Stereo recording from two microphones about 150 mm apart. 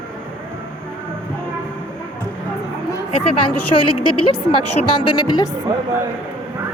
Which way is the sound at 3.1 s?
40° left (ahead or behind).